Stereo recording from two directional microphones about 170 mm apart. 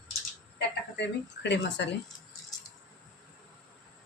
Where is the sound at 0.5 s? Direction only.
90° left.